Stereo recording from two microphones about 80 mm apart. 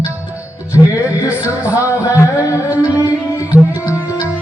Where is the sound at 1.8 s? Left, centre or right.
Left.